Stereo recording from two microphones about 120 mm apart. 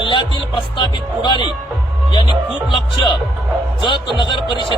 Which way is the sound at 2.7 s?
45° left (ahead or behind).